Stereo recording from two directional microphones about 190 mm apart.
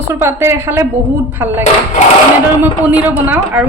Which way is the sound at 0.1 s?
15° right (ahead or behind).